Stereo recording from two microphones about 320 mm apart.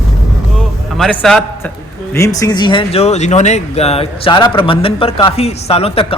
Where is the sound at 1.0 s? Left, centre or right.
Centre.